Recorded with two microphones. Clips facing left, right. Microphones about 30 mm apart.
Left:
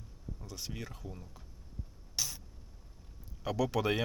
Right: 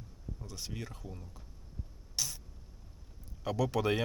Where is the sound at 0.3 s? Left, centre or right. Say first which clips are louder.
Even; centre.